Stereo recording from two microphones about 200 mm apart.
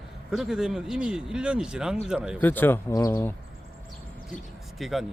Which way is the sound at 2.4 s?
10° left (ahead or behind).